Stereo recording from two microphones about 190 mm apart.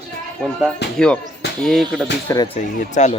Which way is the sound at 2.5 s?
40° left (ahead or behind).